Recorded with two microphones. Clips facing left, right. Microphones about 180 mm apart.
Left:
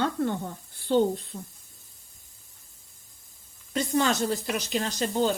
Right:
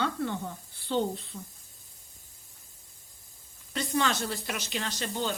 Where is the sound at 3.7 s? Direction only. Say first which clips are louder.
Left 4 dB; 45° left (ahead or behind).